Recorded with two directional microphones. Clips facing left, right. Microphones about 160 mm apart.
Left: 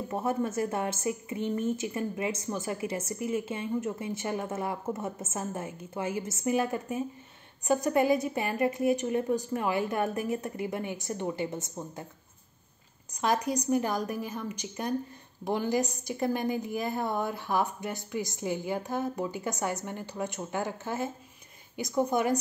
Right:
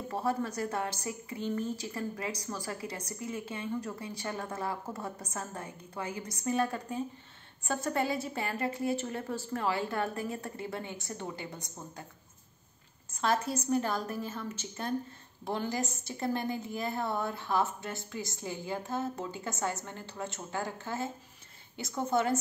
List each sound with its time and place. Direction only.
0.1 s a woman's voice: 20° left (ahead or behind)
13.1 s a woman's voice: 15° left (ahead or behind)